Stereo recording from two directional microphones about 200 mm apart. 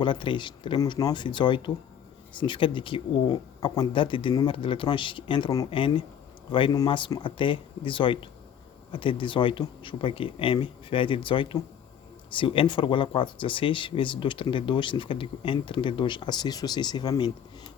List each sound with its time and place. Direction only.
0.0 s speech: 25° left (ahead or behind)